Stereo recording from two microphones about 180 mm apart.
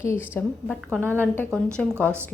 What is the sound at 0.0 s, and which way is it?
A woman's voice, 15° left (ahead or behind).